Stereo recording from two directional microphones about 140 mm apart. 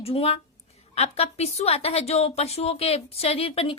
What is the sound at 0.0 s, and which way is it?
A woman's voice, 45° left (ahead or behind).